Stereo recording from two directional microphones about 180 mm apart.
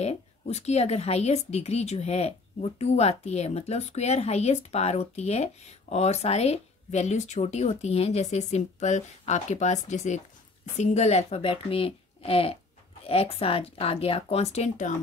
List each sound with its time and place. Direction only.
0.0 s a woman's voice: 35° left (ahead or behind)